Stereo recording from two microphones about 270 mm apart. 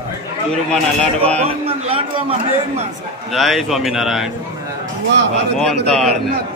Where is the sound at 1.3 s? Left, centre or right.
Right.